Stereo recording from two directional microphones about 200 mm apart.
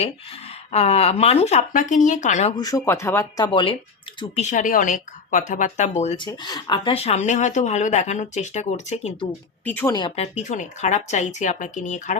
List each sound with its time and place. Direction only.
0.7 s speech: 30° left (ahead or behind)
2.6 s speech: 15° left (ahead or behind); by 6.2 s 35° left (ahead or behind)
6.2 s speech: 20° left (ahead or behind)
9.6 s speech: 10° left (ahead or behind)
9.9 s speech: 25° left (ahead or behind)
10.3 s speech: 35° left (ahead or behind)